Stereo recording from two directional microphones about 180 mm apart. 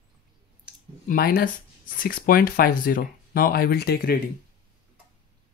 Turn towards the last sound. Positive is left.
turn(degrees=60)  # may be behind; listen again after turning